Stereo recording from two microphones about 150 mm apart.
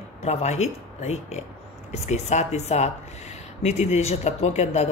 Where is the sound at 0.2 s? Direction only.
45° left (ahead or behind).